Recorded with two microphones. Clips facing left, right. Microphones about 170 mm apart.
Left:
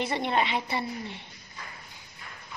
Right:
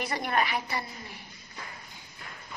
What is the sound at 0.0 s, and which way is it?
A woman's voice, 25° left (ahead or behind).